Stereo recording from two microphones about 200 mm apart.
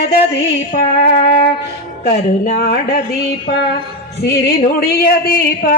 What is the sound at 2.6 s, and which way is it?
Music, 45° left (ahead or behind).